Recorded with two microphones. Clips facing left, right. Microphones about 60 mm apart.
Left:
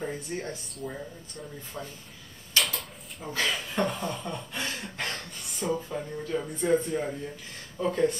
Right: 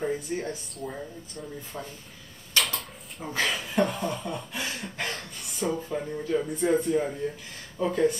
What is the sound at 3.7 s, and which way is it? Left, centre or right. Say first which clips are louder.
Speech: right 6 dB; centre.